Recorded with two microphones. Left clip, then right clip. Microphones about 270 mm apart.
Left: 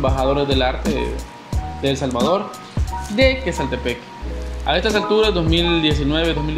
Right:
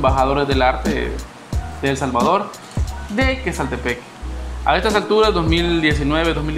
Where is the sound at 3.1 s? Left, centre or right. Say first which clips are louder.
Left 3 dB; right.